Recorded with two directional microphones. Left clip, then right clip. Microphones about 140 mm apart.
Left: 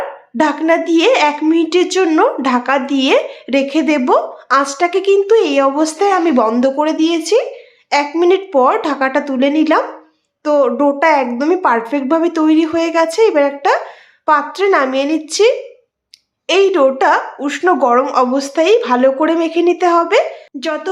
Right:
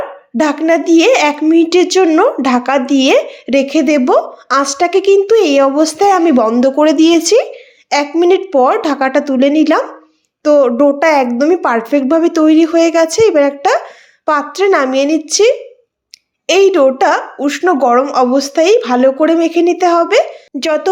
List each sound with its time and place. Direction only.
0.3 s speech: 20° right (ahead or behind)
6.7 s a woman's voice: 45° right (ahead or behind); by 20.4 s 15° right (ahead or behind)
20.6 s speech: 45° right (ahead or behind)